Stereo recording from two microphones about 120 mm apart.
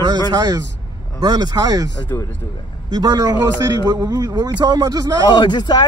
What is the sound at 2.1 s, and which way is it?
Speech, 25° left (ahead or behind).